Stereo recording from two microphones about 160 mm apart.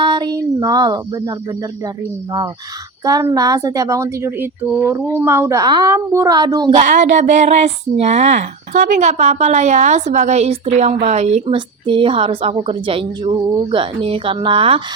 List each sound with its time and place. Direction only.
0.0 s a sound: 30° right (ahead or behind)
3.0 s a woman's voice: 20° right (ahead or behind)
6.7 s a woman's voice: 50° right (ahead or behind); by 14.8 s 35° right (ahead or behind)